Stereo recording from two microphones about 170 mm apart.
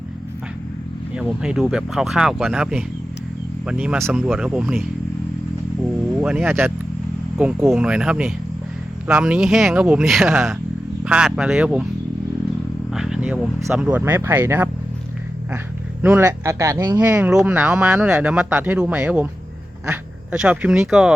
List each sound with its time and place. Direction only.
1.1 s speech: 5° right (ahead or behind)
6.1 s speech: 10° right (ahead or behind)
12.9 s speech: 5° right (ahead or behind)
16.0 s speech: 15° right (ahead or behind)
17.0 s speech: 10° right (ahead or behind)